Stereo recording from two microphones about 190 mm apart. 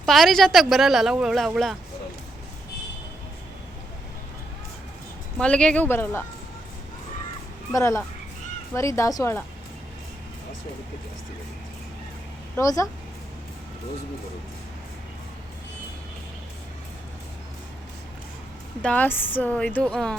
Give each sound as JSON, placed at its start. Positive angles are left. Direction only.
{"t": 0.0, "sound": "speech", "side_deg": 0}
{"t": 5.4, "sound": "a woman's voice", "side_deg": 5}
{"t": 7.7, "sound": "a woman's voice", "side_deg": 15}
{"t": 12.5, "sound": "a woman's voice", "side_deg": 15}
{"t": 18.8, "sound": "a woman's voice", "side_deg": 5}